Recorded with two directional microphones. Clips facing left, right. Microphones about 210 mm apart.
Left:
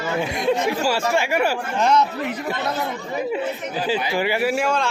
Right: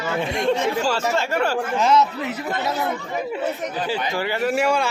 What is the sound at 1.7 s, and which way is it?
Speech, centre (ahead or behind).